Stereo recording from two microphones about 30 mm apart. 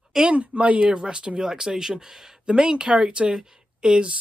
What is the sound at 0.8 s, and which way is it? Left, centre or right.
Speech, right.